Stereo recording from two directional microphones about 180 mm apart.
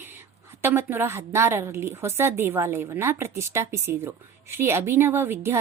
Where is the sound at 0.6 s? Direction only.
15° right (ahead or behind).